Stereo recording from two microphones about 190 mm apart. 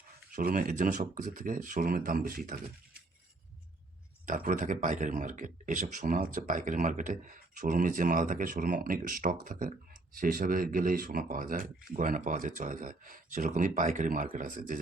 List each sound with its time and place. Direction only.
0.3 s speech: 45° right (ahead or behind)
4.3 s speech: 45° right (ahead or behind)